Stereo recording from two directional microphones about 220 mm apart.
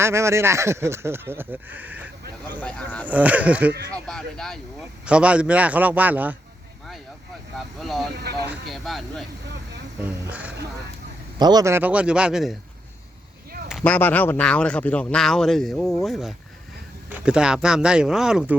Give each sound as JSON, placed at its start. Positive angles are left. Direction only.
{"t": 0.0, "sound": "speech", "side_deg": -10}
{"t": 2.6, "sound": "speech", "side_deg": 5}
{"t": 3.1, "sound": "speech", "side_deg": -5}
{"t": 7.8, "sound": "speech", "side_deg": 0}
{"t": 8.1, "sound": "speech", "side_deg": -50}
{"t": 8.7, "sound": "speech", "side_deg": 0}
{"t": 11.3, "sound": "speech", "side_deg": -20}
{"t": 13.7, "sound": "speech", "side_deg": 5}